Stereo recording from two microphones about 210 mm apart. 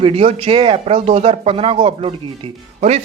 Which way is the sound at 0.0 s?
30° right (ahead or behind).